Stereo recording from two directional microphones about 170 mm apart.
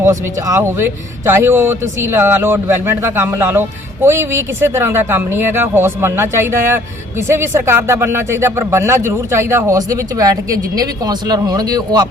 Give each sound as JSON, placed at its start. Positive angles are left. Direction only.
{"t": 0.0, "sound": "a man's voice", "side_deg": -20}